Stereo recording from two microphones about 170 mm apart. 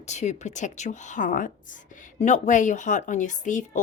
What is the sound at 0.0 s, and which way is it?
A woman's voice, 45° left (ahead or behind).